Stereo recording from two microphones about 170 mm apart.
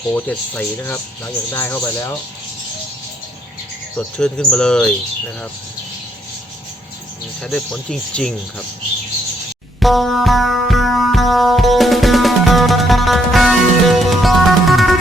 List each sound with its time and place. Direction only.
0.1 s speech: 10° left (ahead or behind)
3.9 s speech: 5° left (ahead or behind)
7.4 s speech: 5° left (ahead or behind)
9.8 s music: centre (ahead or behind)